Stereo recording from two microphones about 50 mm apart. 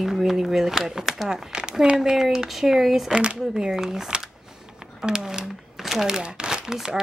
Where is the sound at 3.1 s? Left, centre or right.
Right.